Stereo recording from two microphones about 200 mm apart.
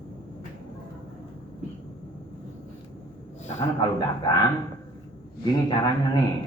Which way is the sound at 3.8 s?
20° left (ahead or behind).